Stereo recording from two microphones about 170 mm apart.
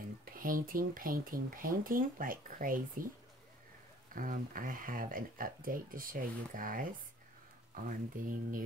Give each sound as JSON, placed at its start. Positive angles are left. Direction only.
{"t": 0.2, "sound": "speech", "side_deg": -55}
{"t": 4.1, "sound": "speech", "side_deg": -55}